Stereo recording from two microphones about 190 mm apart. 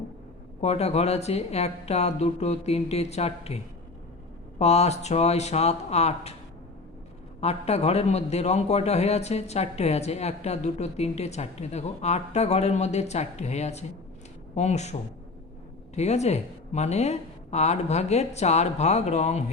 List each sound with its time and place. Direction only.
0.6 s a man's voice: 35° left (ahead or behind)
7.4 s a man's voice: 35° left (ahead or behind)
16.0 s a man's voice: 35° left (ahead or behind)